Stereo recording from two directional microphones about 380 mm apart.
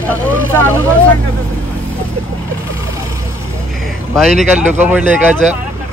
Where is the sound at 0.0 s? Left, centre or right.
Centre.